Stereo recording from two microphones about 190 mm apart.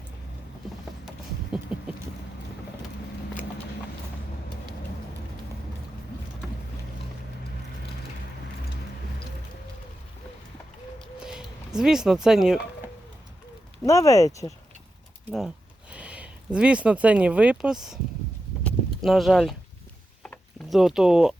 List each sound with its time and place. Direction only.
1.7 s boat: 5° right (ahead or behind)
11.2 s a sound: 5° right (ahead or behind)
13.8 s speech: 15° left (ahead or behind)
15.3 s speech: centre (ahead or behind)
18.6 s clip-clop: centre (ahead or behind)
20.2 s a sound: centre (ahead or behind)